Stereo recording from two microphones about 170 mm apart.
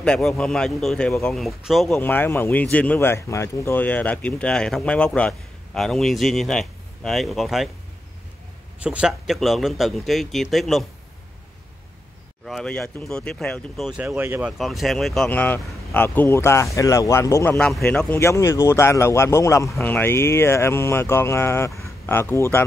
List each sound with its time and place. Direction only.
0.0 s speech: 5° left (ahead or behind)
2.0 s speech: 10° left (ahead or behind)
8.8 s speech: 5° right (ahead or behind)
12.4 s speech: 5° left (ahead or behind)
14.0 s speech: 15° right (ahead or behind)
14.6 s speech: centre (ahead or behind)